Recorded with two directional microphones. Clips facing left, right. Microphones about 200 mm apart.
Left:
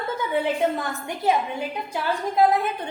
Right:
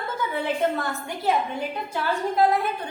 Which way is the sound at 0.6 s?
10° left (ahead or behind).